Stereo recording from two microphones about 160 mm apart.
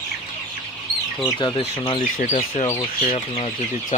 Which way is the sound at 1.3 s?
25° left (ahead or behind).